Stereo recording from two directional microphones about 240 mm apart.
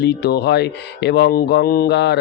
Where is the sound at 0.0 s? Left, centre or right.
Left.